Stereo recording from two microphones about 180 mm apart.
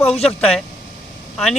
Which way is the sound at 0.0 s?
35° left (ahead or behind).